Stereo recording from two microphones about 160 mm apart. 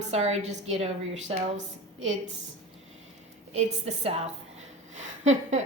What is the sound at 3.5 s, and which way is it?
Speech, 45° right (ahead or behind).